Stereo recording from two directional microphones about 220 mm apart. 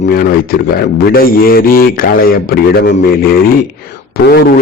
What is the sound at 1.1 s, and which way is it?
A man's voice, 40° left (ahead or behind).